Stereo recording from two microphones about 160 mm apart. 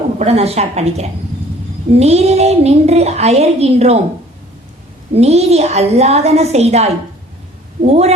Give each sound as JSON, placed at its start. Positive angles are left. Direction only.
{"t": 0.2, "sound": "a woman's voice", "side_deg": -40}
{"t": 5.1, "sound": "speech", "side_deg": -40}